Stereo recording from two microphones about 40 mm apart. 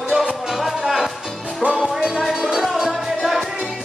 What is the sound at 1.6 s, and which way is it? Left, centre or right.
Music, right.